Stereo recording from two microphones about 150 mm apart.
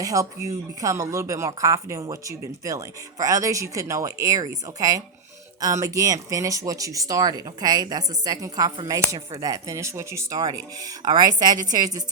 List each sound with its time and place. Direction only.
0.0 s speech: 20° right (ahead or behind)